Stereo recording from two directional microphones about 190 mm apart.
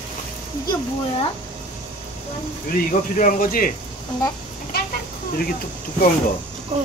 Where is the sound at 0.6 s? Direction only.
25° left (ahead or behind).